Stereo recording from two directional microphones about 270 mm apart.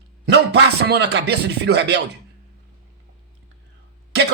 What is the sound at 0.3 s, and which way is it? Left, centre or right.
Speech, right.